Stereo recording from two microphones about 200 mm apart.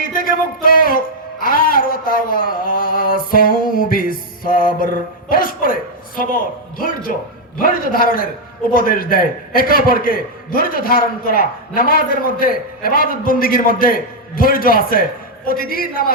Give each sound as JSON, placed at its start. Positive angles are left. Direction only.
{"t": 0.0, "sound": "music", "side_deg": 45}
{"t": 7.6, "sound": "a man's voice", "side_deg": 45}